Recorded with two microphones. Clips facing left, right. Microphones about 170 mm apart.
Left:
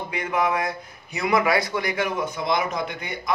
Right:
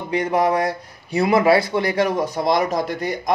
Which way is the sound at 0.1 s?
35° right (ahead or behind).